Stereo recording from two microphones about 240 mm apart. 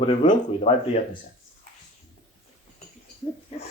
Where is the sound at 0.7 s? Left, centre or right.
Left.